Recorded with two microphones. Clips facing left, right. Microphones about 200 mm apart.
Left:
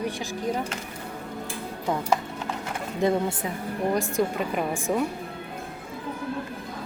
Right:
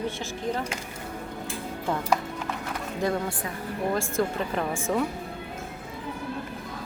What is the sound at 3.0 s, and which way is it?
Speech, 20° left (ahead or behind).